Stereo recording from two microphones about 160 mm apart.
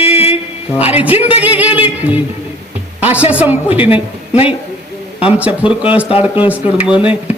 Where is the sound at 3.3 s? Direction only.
10° right (ahead or behind).